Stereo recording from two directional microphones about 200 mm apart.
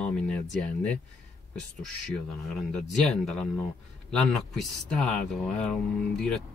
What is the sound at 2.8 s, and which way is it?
Speech, centre (ahead or behind).